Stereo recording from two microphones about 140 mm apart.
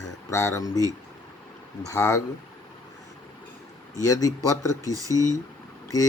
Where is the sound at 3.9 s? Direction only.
25° left (ahead or behind).